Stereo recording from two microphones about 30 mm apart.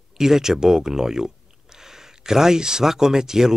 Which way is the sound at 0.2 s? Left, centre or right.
Centre.